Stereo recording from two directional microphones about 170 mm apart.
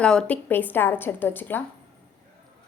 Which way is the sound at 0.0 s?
5° left (ahead or behind).